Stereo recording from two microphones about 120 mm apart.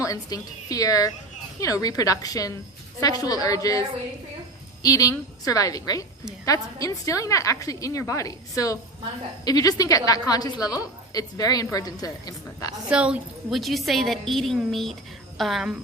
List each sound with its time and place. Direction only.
0.0 s a woman's voice: 30° left (ahead or behind)
12.9 s a woman's voice: 10° right (ahead or behind)